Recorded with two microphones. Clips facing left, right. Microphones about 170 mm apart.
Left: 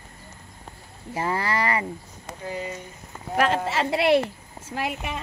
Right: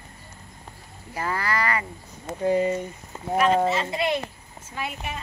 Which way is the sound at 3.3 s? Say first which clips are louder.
Right 2 dB; 85° left.